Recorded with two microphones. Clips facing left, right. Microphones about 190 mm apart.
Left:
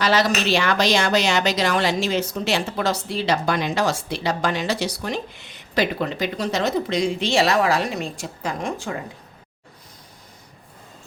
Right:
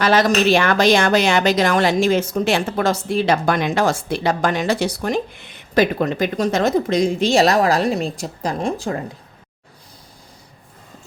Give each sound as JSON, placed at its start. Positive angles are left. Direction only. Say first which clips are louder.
{"t": 0.0, "sound": "a woman's voice", "louder": "right 5 dB", "side_deg": -50}